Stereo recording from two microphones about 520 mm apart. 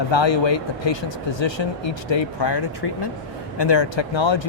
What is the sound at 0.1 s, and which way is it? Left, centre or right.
Speech, left.